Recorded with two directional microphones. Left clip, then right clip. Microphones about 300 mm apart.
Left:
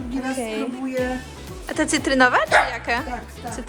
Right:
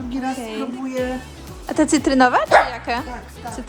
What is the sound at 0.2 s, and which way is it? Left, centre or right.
Music, centre.